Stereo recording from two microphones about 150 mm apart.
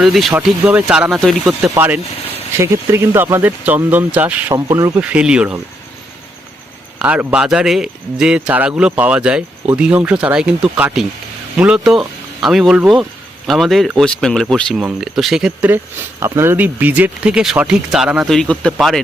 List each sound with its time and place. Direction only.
0.0 s speech: centre (ahead or behind)
0.3 s speech: 10° right (ahead or behind)
1.7 s speech: 15° right (ahead or behind)
4.5 s speech: 25° right (ahead or behind)
4.9 s speech: 10° right (ahead or behind)
7.0 s speech: 10° right (ahead or behind)